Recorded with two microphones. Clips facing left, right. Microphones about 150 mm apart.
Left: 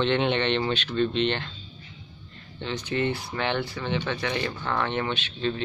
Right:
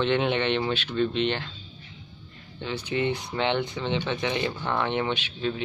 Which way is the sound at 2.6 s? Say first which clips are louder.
Even; 10° right (ahead or behind).